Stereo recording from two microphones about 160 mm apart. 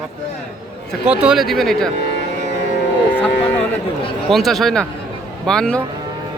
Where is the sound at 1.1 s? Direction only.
5° right (ahead or behind).